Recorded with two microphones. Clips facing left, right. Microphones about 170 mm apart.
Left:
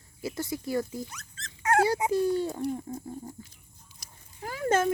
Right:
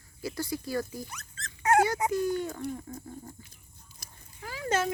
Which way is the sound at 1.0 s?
55° right (ahead or behind).